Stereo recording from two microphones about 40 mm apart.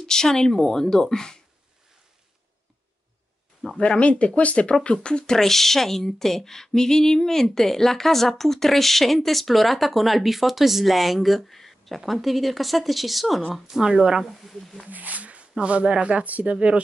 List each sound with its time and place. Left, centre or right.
0.0 s speech: centre
3.7 s speech: left
5.0 s speech: left; by 13.4 s centre
13.7 s a woman's voice: centre
14.4 s speech: centre
14.9 s speech: right